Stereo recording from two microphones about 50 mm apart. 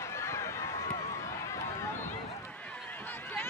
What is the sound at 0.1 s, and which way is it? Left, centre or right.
Run, left.